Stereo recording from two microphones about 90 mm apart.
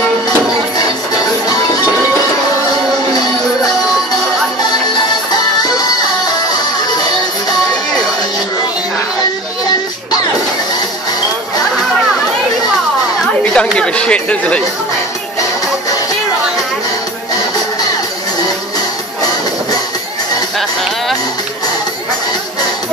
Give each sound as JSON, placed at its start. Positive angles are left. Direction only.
{"t": 5.0, "sound": "music", "side_deg": 50}
{"t": 13.4, "sound": "speech", "side_deg": 10}